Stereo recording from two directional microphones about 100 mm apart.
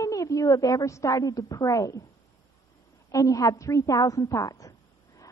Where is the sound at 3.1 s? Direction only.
35° left (ahead or behind).